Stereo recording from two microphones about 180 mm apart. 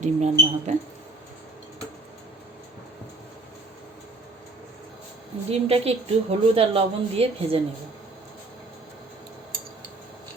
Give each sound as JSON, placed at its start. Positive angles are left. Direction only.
{"t": 0.0, "sound": "a woman's voice", "side_deg": -40}
{"t": 5.5, "sound": "a woman's voice", "side_deg": -35}